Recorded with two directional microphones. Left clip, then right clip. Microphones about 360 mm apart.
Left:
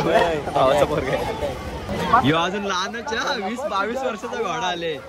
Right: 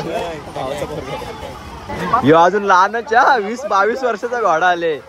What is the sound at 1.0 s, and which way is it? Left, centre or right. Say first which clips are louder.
Speech: left 3 dB; centre.